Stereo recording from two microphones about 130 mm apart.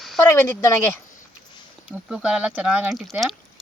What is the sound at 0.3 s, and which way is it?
Speech, 20° left (ahead or behind).